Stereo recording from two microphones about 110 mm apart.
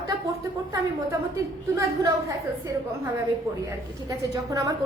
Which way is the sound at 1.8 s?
30° right (ahead or behind).